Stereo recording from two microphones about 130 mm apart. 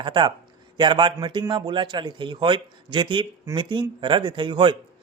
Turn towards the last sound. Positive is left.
turn(degrees=-40)  # may be behind; listen again after turning